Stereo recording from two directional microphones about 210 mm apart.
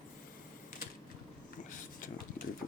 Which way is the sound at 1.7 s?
35° left (ahead or behind).